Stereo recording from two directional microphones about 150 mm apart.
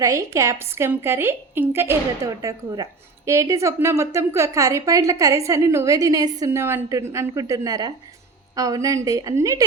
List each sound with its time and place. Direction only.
0.0 s a woman's voice: 20° right (ahead or behind)